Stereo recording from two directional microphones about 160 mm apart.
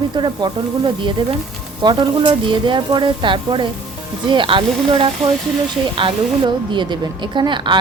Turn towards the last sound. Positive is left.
turn(degrees=-30)  # may be behind; listen again after turning